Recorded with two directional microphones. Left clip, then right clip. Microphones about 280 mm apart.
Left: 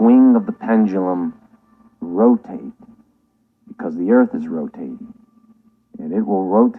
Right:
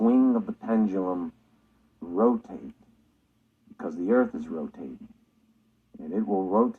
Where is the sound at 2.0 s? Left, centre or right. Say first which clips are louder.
Left 9 dB; left.